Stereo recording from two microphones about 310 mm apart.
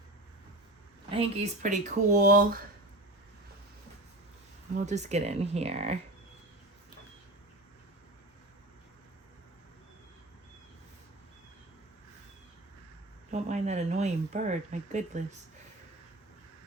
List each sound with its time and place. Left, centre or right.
1.1 s speech: right
4.7 s speech: right
13.3 s speech: right